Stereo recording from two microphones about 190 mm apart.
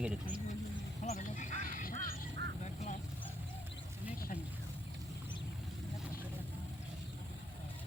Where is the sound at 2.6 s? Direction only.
40° left (ahead or behind).